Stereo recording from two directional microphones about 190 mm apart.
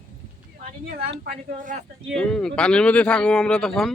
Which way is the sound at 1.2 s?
45° right (ahead or behind).